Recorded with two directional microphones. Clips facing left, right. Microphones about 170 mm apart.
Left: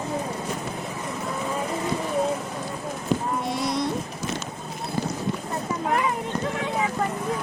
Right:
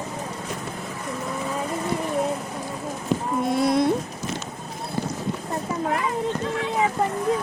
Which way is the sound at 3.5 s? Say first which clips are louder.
Right 9 dB; 55° right (ahead or behind).